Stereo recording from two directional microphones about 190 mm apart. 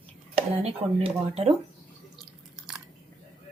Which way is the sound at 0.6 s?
35° right (ahead or behind).